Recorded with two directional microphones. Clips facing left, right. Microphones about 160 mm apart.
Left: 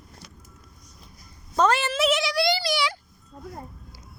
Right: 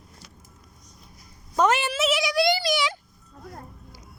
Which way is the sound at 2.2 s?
20° right (ahead or behind).